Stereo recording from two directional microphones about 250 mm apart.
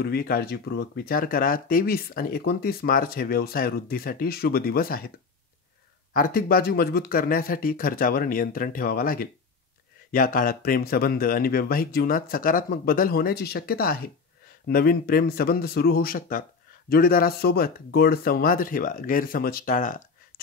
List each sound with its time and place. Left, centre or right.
0.0 s speech: left
6.1 s speech: left